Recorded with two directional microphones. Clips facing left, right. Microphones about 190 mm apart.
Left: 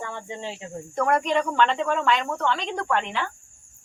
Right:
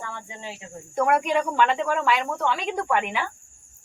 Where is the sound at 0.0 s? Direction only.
25° left (ahead or behind).